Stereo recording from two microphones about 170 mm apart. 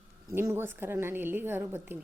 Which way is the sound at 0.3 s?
15° right (ahead or behind).